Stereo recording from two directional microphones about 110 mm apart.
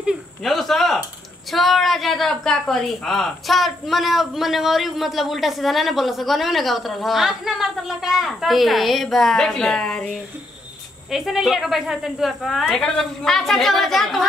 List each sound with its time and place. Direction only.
0.4 s a woman's voice: centre (ahead or behind)